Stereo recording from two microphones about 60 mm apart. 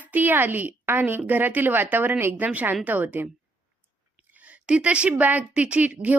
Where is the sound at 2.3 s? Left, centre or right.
Right.